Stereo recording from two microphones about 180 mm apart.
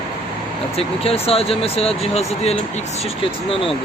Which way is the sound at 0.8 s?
35° left (ahead or behind).